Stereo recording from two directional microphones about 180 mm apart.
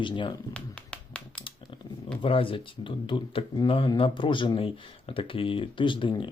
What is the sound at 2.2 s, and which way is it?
Speech, 30° left (ahead or behind).